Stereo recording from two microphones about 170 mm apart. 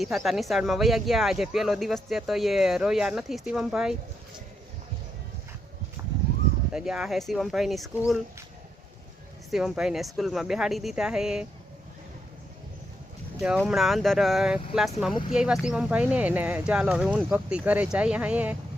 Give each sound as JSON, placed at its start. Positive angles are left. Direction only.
{"t": 0.3, "sound": "speech", "side_deg": 0}
{"t": 6.0, "sound": "horse", "side_deg": -20}
{"t": 6.7, "sound": "speech", "side_deg": -5}
{"t": 9.5, "sound": "speech", "side_deg": 0}
{"t": 13.6, "sound": "speech", "side_deg": 0}